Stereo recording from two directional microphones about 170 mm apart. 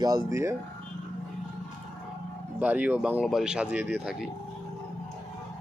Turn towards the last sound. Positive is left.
turn(degrees=-10)  # may be behind; listen again after turning